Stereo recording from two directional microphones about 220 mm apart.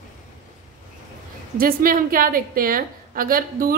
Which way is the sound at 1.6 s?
40° right (ahead or behind).